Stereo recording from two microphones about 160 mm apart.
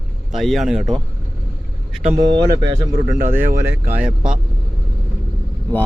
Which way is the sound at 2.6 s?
20° right (ahead or behind).